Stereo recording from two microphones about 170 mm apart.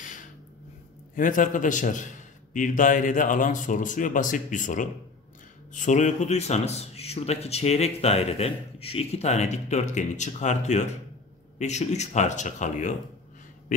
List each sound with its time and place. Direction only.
1.1 s speech: 50° left (ahead or behind)